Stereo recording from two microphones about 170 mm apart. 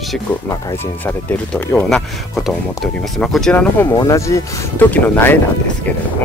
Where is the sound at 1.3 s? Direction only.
10° left (ahead or behind).